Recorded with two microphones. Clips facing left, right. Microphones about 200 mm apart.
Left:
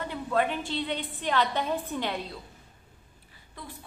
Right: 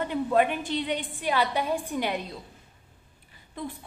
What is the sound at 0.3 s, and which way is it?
A woman's voice, 15° right (ahead or behind).